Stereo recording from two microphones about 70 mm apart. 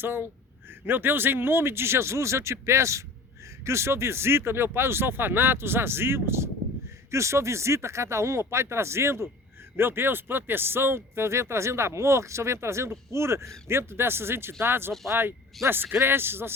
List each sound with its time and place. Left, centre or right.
0.0 s speech: right